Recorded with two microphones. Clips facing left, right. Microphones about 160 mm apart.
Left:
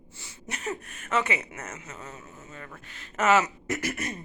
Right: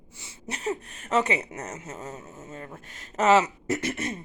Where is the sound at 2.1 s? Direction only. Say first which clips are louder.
Right 4 dB; 25° right (ahead or behind).